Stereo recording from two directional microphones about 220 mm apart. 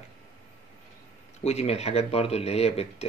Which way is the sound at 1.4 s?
30° left (ahead or behind).